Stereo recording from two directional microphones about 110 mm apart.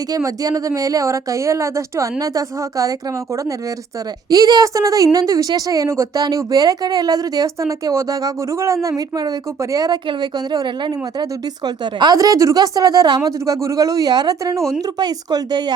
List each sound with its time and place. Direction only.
0.1 s a woman's voice: 30° right (ahead or behind)
4.3 s a woman's voice: 35° right (ahead or behind)